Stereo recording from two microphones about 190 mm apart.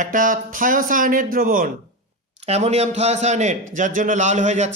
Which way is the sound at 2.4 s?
35° right (ahead or behind).